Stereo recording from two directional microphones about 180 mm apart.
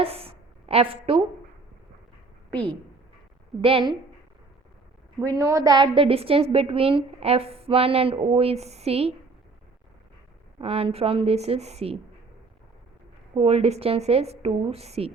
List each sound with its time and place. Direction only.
0.0 s a sound: 35° right (ahead or behind)
3.6 s a woman's voice: 30° right (ahead or behind)
5.2 s a woman's voice: 20° right (ahead or behind); by 9.1 s 35° right (ahead or behind)
10.6 s a woman's voice: 30° right (ahead or behind)
13.3 s a woman's voice: 35° right (ahead or behind)